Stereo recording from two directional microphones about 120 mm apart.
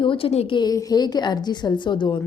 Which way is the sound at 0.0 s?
50° left (ahead or behind).